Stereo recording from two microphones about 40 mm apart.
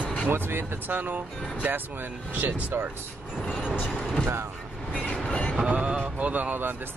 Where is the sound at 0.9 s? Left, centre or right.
Right.